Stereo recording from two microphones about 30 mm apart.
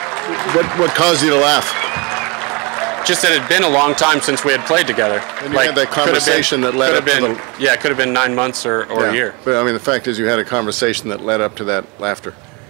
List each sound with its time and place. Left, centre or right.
0.3 s speech: centre